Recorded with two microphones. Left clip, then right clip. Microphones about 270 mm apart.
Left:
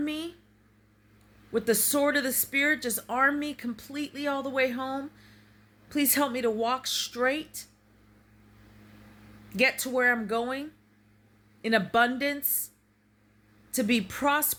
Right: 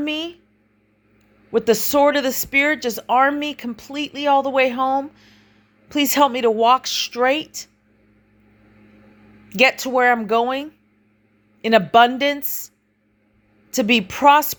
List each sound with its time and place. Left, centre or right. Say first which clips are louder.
0.0 s speech: right 8 dB; centre
1.5 s speech: right 10 dB; centre
9.5 s speech: right 10 dB; centre